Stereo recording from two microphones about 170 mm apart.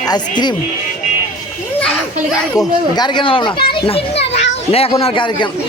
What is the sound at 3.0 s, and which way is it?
A child's voice, 25° left (ahead or behind).